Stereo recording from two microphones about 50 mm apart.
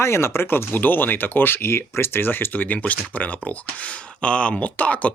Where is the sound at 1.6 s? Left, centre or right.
Left.